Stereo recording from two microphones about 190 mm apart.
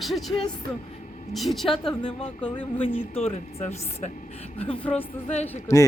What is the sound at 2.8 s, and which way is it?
A woman's voice, 30° left (ahead or behind).